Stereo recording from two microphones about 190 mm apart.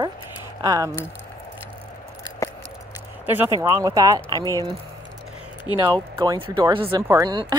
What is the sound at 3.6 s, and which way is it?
Speech, 15° right (ahead or behind).